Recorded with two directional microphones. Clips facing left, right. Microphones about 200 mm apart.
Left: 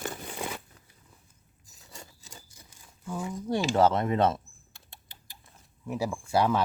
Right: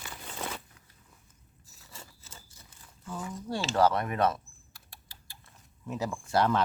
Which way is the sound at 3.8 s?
25° left (ahead or behind).